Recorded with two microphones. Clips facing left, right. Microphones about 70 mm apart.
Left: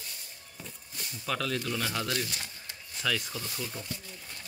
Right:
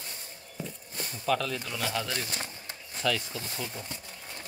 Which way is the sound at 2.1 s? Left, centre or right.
Right.